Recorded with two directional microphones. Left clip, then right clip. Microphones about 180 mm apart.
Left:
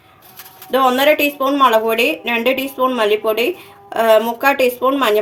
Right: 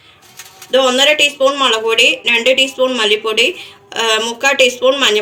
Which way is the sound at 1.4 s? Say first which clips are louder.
Even; 45° left (ahead or behind).